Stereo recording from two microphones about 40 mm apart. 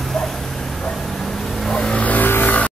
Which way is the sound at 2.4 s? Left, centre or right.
Left.